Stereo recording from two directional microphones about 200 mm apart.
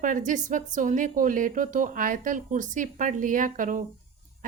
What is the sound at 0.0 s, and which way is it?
A woman's voice, 40° right (ahead or behind).